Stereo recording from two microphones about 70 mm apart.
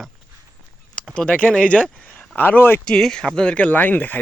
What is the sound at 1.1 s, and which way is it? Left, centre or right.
Speech, centre.